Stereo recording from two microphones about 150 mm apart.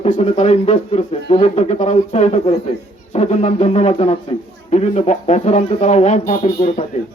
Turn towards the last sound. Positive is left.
turn(degrees=45)  # may be behind; listen again after turning